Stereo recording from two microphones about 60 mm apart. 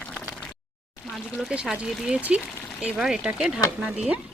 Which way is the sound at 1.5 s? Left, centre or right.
Centre.